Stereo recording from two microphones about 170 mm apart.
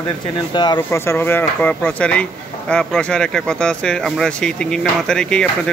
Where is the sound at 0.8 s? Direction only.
15° left (ahead or behind).